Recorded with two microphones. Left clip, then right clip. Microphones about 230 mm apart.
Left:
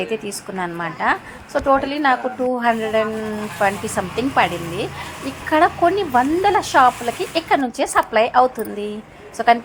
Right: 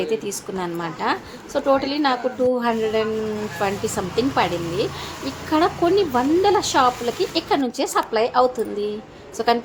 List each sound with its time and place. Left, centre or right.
0.0 s a woman's voice: centre